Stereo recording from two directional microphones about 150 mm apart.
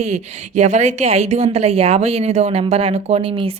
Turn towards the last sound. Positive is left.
turn(degrees=-40)  # may be behind; listen again after turning